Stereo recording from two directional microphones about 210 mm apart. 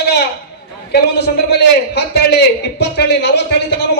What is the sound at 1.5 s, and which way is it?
A man's voice, 50° left (ahead or behind).